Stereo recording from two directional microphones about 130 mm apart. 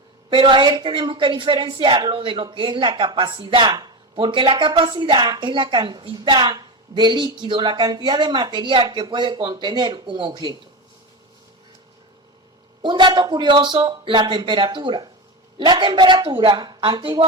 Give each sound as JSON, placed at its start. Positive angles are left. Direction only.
{"t": 0.3, "sound": "a woman's voice", "side_deg": -40}
{"t": 12.8, "sound": "a woman's voice", "side_deg": -40}